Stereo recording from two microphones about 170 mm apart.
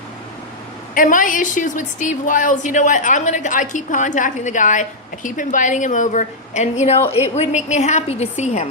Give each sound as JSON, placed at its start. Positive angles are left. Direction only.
{"t": 0.9, "sound": "a woman's voice", "side_deg": 50}